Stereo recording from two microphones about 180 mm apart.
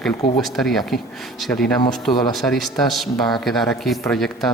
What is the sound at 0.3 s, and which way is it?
Speech, centre (ahead or behind).